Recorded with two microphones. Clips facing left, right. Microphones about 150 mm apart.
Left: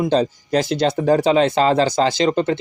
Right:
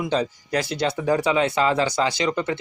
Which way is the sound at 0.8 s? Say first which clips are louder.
Left 5 dB; 45° left (ahead or behind).